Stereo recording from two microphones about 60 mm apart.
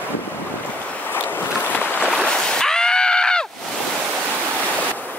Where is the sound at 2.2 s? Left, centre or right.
Centre.